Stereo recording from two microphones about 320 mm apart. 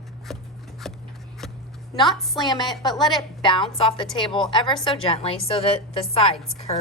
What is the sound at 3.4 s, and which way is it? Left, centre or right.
A woman's voice, centre.